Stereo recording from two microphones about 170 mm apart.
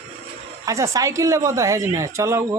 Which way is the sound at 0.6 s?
20° right (ahead or behind).